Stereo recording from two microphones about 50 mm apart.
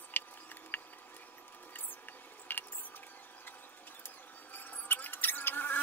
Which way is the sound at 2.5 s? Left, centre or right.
Left.